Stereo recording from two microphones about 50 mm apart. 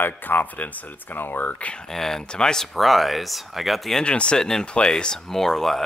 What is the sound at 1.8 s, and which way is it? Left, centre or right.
Speech, centre.